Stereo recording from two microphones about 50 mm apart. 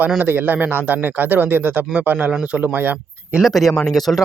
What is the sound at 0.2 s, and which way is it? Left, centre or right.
Speech, right.